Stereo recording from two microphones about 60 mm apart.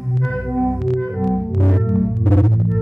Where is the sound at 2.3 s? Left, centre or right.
Left.